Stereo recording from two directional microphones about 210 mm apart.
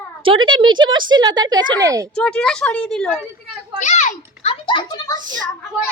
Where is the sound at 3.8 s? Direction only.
35° left (ahead or behind); by 5.2 s 20° left (ahead or behind).